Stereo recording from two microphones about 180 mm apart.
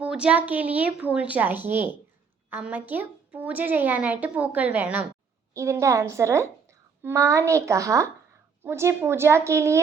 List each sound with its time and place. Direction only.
0.0 s a woman's voice: 5° right (ahead or behind)